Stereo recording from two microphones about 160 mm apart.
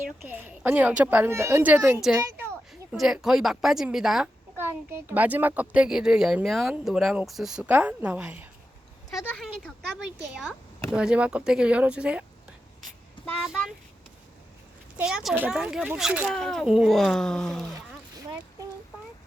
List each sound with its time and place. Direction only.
0.3 s speech: 10° right (ahead or behind)
2.1 s speech: 15° right (ahead or behind)
2.9 s speech: 5° right (ahead or behind)
4.5 s speech: 15° right (ahead or behind)
9.2 s speech: 5° left (ahead or behind)
10.9 s speech: 5° right (ahead or behind)
13.4 s speech: centre (ahead or behind)
14.9 s speech: 5° right (ahead or behind)